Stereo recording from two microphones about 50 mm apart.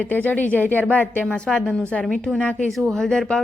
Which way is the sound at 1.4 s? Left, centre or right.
Centre.